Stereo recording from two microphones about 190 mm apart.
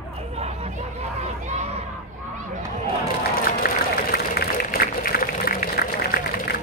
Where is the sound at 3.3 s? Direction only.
50° left (ahead or behind).